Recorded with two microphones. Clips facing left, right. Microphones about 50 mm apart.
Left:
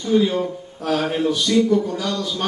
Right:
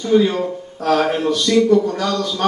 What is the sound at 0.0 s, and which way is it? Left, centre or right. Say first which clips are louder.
Speech: right 3 dB; right.